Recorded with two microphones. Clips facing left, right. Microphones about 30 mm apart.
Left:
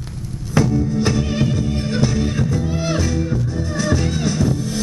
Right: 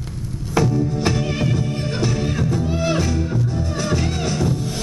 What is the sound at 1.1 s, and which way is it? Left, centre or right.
Music, right.